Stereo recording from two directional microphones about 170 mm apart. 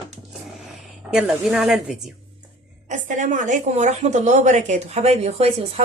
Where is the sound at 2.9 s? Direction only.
45° right (ahead or behind).